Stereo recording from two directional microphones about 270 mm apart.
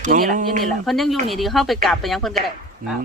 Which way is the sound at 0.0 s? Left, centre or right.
Right.